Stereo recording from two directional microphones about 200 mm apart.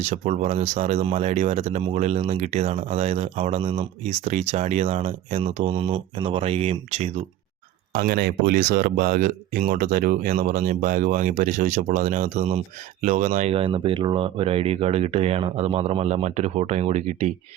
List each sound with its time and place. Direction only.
0.0 s speech: 35° right (ahead or behind)
7.9 s speech: 50° right (ahead or behind); by 17.3 s 35° right (ahead or behind)